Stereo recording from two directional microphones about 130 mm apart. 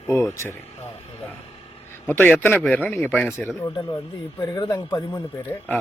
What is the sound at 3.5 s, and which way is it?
Speech, 30° left (ahead or behind).